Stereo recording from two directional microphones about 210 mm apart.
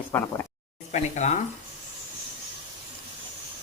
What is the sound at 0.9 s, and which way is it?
Speech, 35° left (ahead or behind).